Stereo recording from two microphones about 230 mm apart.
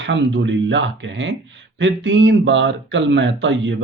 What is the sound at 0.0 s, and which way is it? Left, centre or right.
Speech, right.